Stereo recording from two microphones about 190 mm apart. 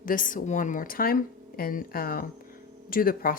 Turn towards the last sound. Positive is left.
turn(degrees=50)  # may be behind; listen again after turning